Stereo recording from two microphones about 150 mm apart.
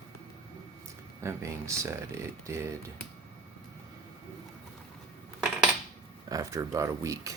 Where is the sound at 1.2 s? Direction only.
20° right (ahead or behind).